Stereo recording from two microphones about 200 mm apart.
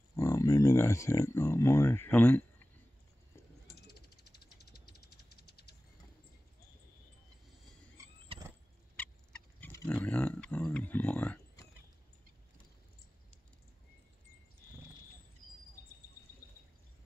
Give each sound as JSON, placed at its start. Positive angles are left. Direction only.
{"t": 0.1, "sound": "speech", "side_deg": 15}
{"t": 3.6, "sound": "a sound", "side_deg": 50}
{"t": 8.3, "sound": "vehicle", "side_deg": -20}
{"t": 8.9, "sound": "turkey", "side_deg": 5}